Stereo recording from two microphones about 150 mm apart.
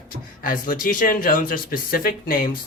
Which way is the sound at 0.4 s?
70° left (ahead or behind).